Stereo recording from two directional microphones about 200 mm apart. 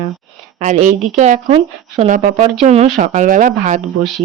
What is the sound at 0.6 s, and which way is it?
Speech, 40° right (ahead or behind).